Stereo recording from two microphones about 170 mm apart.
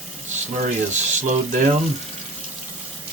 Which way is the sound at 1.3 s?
50° right (ahead or behind).